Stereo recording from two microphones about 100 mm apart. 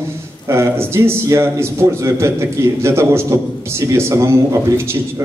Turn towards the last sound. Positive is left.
turn(degrees=-25)  # may be behind; listen again after turning